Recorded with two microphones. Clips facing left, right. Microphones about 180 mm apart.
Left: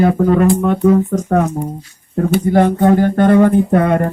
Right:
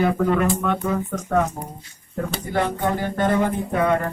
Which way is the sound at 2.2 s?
45° left (ahead or behind).